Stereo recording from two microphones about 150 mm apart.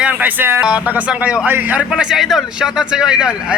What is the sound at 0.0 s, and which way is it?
A man's voice, 10° right (ahead or behind).